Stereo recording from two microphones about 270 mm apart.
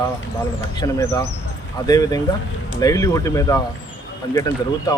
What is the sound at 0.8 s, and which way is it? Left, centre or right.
Speech, centre.